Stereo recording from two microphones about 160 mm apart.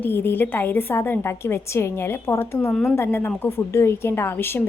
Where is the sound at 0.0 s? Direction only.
15° left (ahead or behind).